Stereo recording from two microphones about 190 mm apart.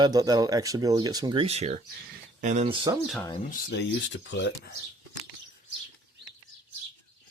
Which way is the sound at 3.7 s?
65° left (ahead or behind).